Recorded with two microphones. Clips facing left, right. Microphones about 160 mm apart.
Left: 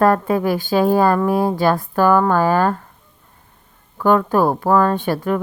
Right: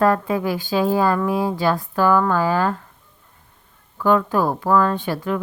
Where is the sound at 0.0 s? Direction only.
50° left (ahead or behind).